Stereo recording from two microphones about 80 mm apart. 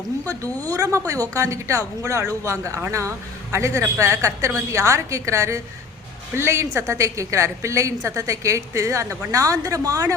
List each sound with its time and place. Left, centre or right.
0.7 s a woman's voice: right